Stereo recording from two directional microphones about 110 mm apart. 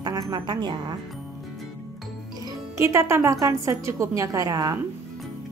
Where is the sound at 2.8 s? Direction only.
25° right (ahead or behind).